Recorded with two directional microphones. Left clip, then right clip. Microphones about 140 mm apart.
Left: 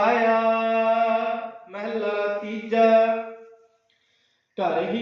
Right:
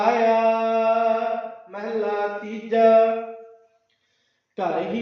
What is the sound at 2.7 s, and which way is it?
Mantra, 45° right (ahead or behind).